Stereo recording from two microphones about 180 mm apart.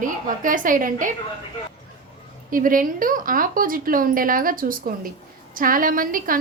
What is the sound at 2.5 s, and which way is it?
A woman's voice, 50° right (ahead or behind).